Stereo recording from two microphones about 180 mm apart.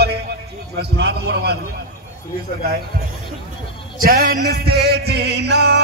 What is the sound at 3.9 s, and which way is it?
A man's voice, 55° right (ahead or behind).